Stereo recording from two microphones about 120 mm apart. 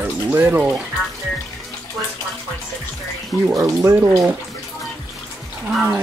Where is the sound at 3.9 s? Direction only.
20° right (ahead or behind).